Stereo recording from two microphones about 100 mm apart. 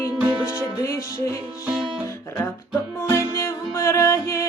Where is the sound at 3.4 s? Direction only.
25° left (ahead or behind).